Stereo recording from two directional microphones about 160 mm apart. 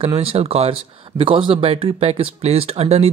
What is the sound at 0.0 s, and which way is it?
Speech, 35° right (ahead or behind).